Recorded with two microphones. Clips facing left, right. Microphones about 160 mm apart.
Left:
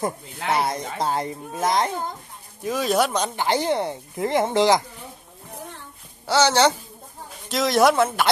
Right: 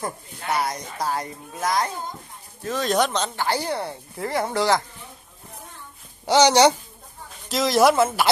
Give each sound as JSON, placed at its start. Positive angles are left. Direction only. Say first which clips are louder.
{"t": 0.5, "sound": "speech", "louder": "left 2 dB", "side_deg": 25}
{"t": 2.6, "sound": "speech", "louder": "left 1 dB", "side_deg": 10}
{"t": 6.2, "sound": "a woman's voice", "louder": "right 3 dB", "side_deg": -15}
{"t": 7.4, "sound": "speech", "louder": "even", "side_deg": 0}